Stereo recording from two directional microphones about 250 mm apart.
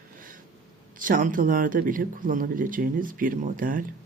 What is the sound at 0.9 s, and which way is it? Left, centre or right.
Speech, right.